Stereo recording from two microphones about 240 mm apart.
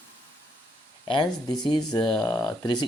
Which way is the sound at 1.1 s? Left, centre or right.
Centre.